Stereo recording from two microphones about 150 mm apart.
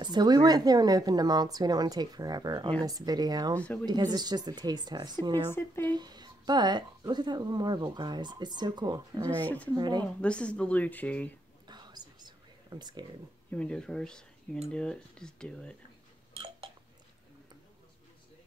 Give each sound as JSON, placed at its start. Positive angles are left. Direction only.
{"t": 0.0, "sound": "speech", "side_deg": -30}
{"t": 3.5, "sound": "speech", "side_deg": 10}
{"t": 3.8, "sound": "speech", "side_deg": -25}
{"t": 5.5, "sound": "speech", "side_deg": 15}
{"t": 5.9, "sound": "speech", "side_deg": -30}
{"t": 10.2, "sound": "speech", "side_deg": 5}
{"t": 11.6, "sound": "whispering", "side_deg": -30}
{"t": 13.5, "sound": "speech", "side_deg": 5}
{"t": 16.3, "sound": "a sound", "side_deg": -35}